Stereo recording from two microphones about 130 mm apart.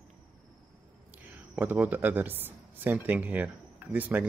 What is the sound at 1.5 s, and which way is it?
Speech, 10° right (ahead or behind).